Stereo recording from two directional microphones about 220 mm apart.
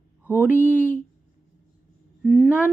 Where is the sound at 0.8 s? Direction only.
35° left (ahead or behind).